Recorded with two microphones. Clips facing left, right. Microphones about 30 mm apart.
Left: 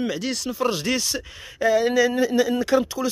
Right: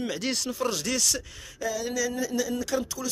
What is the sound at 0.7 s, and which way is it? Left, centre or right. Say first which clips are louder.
Speech: left 5 dB; left.